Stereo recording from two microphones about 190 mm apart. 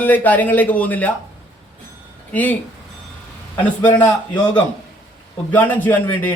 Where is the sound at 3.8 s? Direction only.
10° left (ahead or behind).